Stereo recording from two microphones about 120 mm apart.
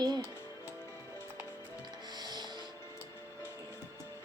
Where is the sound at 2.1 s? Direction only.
35° right (ahead or behind).